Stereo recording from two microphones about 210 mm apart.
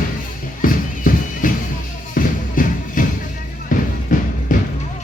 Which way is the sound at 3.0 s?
40° left (ahead or behind).